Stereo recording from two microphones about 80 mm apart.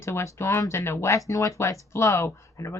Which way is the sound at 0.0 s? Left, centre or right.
Left.